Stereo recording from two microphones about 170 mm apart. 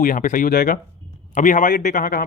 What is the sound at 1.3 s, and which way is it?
Speech, 50° left (ahead or behind).